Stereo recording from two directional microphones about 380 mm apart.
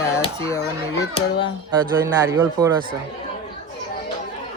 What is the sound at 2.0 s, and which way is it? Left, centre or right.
Speech, centre.